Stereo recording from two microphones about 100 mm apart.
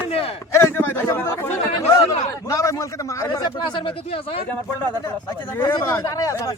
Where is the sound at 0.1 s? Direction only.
80° left.